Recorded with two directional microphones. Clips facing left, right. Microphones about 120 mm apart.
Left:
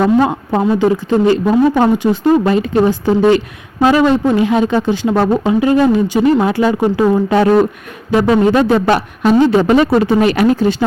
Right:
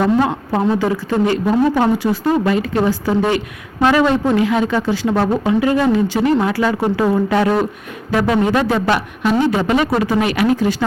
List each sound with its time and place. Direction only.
0.0 s speech: 20° left (ahead or behind)